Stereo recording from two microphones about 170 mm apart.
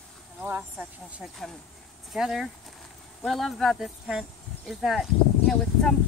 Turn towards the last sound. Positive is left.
turn(degrees=0)  # may be behind; listen again after turning